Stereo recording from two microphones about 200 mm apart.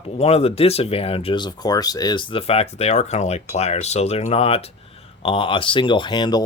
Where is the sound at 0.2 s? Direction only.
30° left (ahead or behind).